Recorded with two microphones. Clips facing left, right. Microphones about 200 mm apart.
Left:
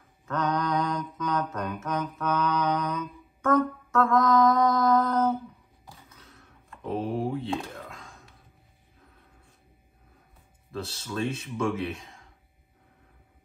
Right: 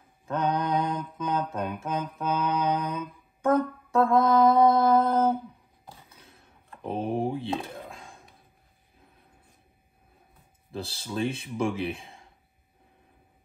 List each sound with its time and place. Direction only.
0.3 s mantra: 30° right (ahead or behind)
5.9 s a sound: 30° right (ahead or behind)
10.7 s speech: 30° right (ahead or behind)